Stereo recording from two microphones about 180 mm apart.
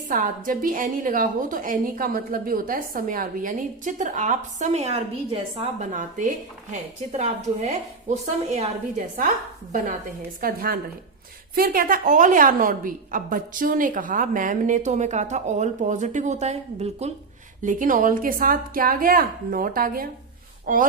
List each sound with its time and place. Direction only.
0.1 s a woman's voice: 50° right (ahead or behind); by 5.9 s 35° right (ahead or behind)
5.9 s a woman's voice: 45° right (ahead or behind)
10.4 s a woman's voice: 55° right (ahead or behind)